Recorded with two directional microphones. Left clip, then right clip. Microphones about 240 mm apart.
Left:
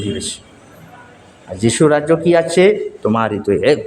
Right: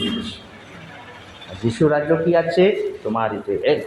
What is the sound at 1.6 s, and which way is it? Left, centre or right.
Speech, left.